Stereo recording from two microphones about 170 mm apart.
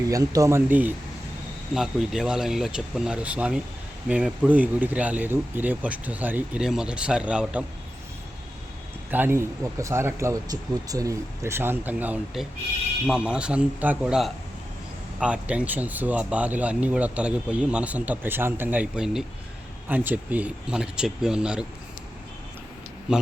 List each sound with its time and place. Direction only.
0.1 s speech: 20° right (ahead or behind)
9.0 s speech: 10° right (ahead or behind)
23.1 s speech: 5° right (ahead or behind)